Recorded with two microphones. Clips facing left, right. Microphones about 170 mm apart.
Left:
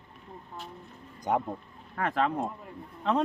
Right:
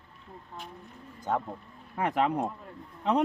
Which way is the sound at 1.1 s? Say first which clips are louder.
Left 2 dB; 15° left (ahead or behind).